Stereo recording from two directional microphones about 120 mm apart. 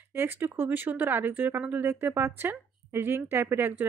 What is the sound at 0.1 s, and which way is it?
Speech, 20° right (ahead or behind).